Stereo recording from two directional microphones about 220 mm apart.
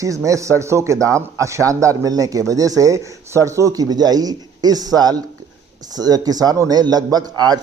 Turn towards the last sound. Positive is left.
turn(degrees=-20)  # may be behind; listen again after turning